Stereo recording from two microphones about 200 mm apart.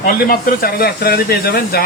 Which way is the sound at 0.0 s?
50° left (ahead or behind).